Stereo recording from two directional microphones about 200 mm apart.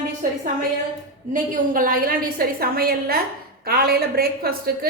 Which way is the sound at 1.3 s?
45° right (ahead or behind).